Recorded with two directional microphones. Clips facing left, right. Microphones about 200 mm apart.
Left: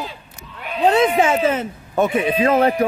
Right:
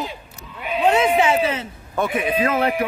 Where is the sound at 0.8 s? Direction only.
40° left (ahead or behind).